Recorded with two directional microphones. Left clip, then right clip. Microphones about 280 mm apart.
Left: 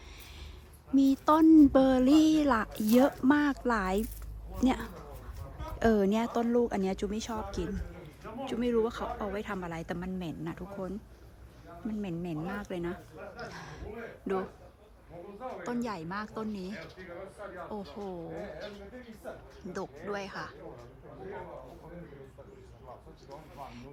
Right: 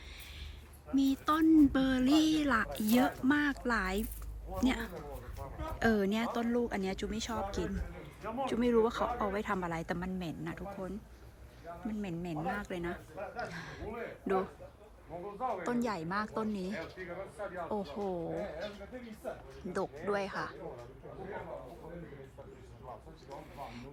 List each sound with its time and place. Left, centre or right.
0.9 s speech: centre
13.5 s a sound: centre
15.6 s speech: centre
19.7 s speech: centre
23.3 s speech: centre